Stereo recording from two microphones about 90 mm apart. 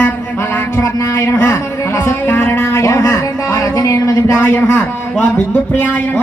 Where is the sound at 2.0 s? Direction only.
25° left (ahead or behind).